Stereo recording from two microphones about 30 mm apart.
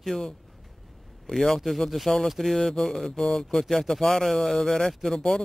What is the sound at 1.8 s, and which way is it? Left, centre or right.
Speech, centre.